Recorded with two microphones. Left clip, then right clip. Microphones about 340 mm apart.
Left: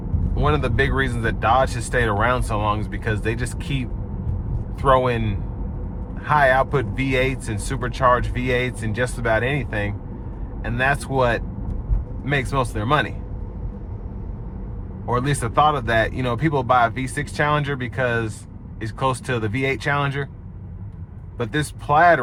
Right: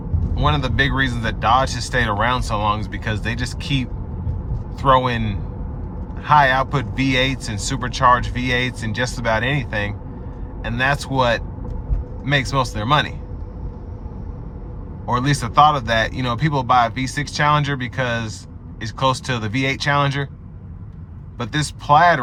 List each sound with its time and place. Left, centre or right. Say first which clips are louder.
0.3 s speech: right 1 dB; centre
15.0 s speech: right 2 dB; centre
21.3 s speech: even; centre